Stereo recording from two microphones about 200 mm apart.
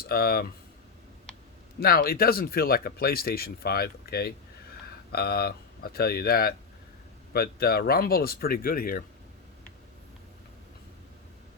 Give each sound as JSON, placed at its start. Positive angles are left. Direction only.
{"t": 0.0, "sound": "speech", "side_deg": 50}
{"t": 1.8, "sound": "speech", "side_deg": 45}